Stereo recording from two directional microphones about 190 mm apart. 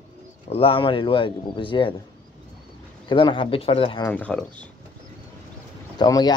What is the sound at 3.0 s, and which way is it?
Speech, 25° left (ahead or behind).